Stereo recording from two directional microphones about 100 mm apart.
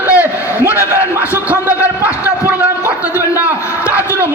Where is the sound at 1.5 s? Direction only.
15° right (ahead or behind).